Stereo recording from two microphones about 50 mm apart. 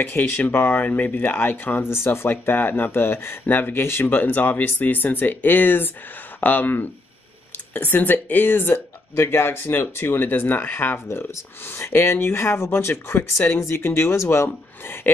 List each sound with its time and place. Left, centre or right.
0.0 s speech: left
1.3 s speech: left